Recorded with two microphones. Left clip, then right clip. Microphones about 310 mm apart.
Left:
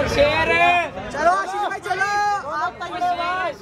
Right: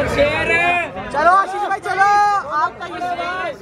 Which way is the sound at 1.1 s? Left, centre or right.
Centre.